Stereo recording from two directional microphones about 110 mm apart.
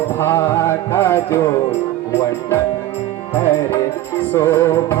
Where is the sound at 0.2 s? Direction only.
20° left (ahead or behind).